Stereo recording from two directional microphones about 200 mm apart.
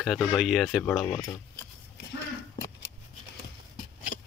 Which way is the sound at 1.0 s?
20° left (ahead or behind).